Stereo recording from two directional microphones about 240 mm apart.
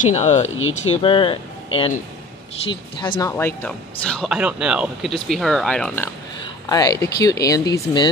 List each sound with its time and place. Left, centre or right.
0.1 s speech: left; by 6.0 s centre
6.4 s speech: centre